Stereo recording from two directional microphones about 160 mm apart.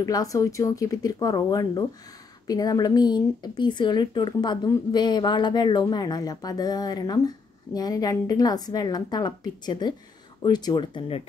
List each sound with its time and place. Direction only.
0.0 s speech: 20° left (ahead or behind)